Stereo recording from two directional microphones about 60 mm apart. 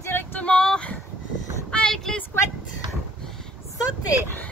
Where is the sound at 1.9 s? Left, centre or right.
Centre.